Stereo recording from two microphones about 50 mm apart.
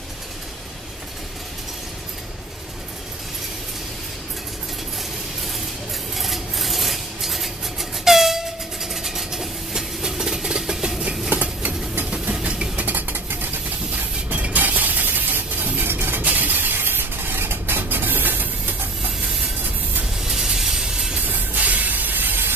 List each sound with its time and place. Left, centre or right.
6.1 s filing: centre
8.0 s train: centre
8.8 s vehicle: centre
12.4 s vehicle: centre
12.8 s vehicle: right
14.4 s a sound: right
20.2 s a sound: centre
21.3 s train: right